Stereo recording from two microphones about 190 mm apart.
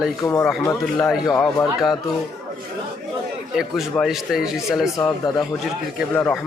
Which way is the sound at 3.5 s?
Centre (ahead or behind).